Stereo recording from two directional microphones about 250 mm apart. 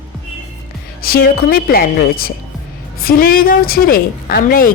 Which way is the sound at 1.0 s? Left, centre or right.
Left.